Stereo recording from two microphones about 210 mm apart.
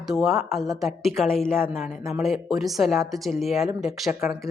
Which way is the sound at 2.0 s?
15° right (ahead or behind).